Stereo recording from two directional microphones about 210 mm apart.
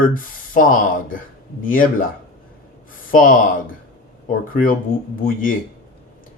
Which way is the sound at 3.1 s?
40° left (ahead or behind).